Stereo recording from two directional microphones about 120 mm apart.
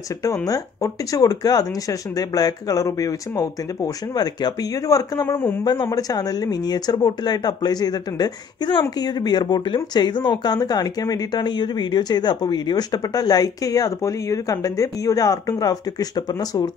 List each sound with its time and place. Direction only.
0.5 s speech: 30° left (ahead or behind)